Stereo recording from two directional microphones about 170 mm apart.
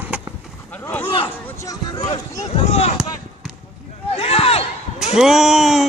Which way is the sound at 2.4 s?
40° left (ahead or behind).